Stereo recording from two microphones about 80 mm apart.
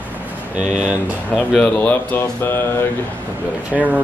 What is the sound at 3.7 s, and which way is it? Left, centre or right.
Speech, centre.